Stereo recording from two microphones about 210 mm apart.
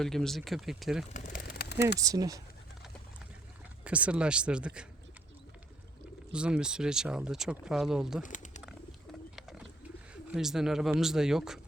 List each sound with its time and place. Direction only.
0.0 s speech: centre (ahead or behind)
1.1 s a sound: 40° left (ahead or behind)
2.0 s speech: 15° right (ahead or behind)
3.8 s speech: 5° right (ahead or behind)
6.3 s speech: 5° right (ahead or behind)
8.2 s bird: 35° left (ahead or behind)
9.3 s bird: centre (ahead or behind)
10.3 s speech: centre (ahead or behind)